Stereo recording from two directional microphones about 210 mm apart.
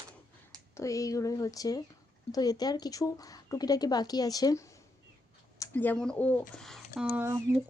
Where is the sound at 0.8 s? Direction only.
15° left (ahead or behind).